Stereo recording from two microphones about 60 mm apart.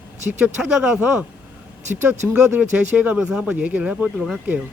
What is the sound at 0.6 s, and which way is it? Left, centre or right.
Speech, centre.